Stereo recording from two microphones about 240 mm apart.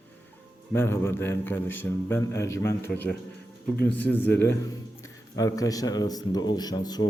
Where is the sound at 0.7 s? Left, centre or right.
Centre.